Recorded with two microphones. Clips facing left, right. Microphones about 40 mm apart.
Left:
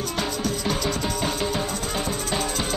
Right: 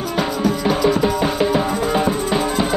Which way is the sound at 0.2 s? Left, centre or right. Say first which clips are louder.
Right 9 dB; centre.